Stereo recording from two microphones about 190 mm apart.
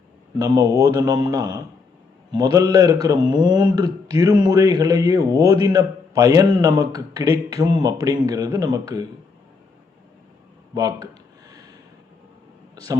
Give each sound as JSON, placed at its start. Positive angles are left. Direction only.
{"t": 0.3, "sound": "a man's voice", "side_deg": -20}
{"t": 10.8, "sound": "a sound", "side_deg": -20}
{"t": 12.7, "sound": "speech", "side_deg": -20}